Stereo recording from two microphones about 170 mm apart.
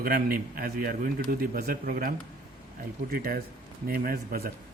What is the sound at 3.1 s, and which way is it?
A man's voice, 60° right (ahead or behind).